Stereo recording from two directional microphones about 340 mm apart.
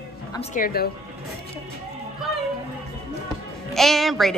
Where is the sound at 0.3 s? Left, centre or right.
Centre.